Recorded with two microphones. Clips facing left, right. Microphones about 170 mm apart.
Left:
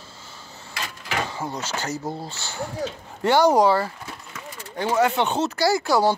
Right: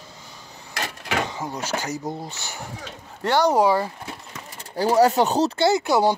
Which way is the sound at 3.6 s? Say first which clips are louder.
Even; 15° right (ahead or behind).